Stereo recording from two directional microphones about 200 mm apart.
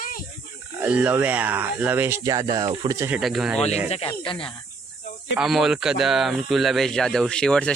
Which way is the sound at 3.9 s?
30° left (ahead or behind).